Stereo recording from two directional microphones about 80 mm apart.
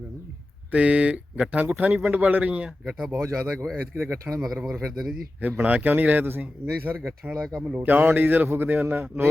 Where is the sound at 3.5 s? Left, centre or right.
Centre.